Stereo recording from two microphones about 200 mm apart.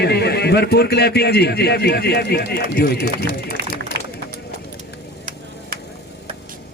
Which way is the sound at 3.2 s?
55° right (ahead or behind).